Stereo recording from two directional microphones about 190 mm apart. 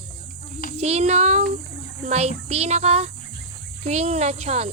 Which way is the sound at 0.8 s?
35° right (ahead or behind).